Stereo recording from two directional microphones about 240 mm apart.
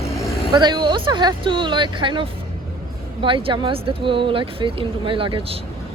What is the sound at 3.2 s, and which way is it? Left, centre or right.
Speech, right.